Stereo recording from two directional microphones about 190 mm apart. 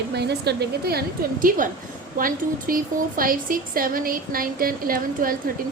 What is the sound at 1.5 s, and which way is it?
A woman's voice, 45° right (ahead or behind).